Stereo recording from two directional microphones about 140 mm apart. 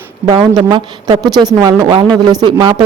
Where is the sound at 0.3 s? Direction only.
30° right (ahead or behind).